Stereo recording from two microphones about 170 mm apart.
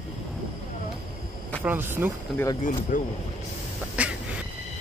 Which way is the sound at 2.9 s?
50° left (ahead or behind).